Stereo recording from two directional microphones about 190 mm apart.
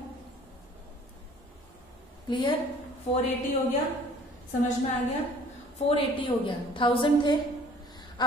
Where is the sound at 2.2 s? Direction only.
25° left (ahead or behind).